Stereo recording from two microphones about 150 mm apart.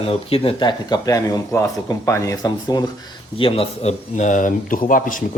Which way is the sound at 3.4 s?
40° left (ahead or behind).